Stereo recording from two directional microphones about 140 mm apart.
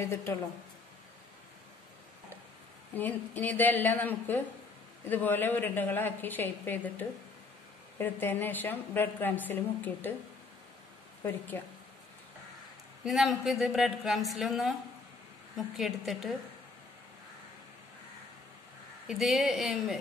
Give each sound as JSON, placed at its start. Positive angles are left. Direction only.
{"t": 0.0, "sound": "a woman's voice", "side_deg": 20}
{"t": 2.9, "sound": "a woman's voice", "side_deg": 15}
{"t": 11.2, "sound": "a woman's voice", "side_deg": 15}
{"t": 13.0, "sound": "a woman's voice", "side_deg": 0}
{"t": 19.0, "sound": "a woman's voice", "side_deg": 0}